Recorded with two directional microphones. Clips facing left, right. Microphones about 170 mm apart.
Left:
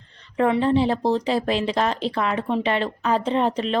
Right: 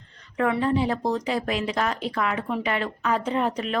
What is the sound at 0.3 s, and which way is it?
Speech, 30° left (ahead or behind).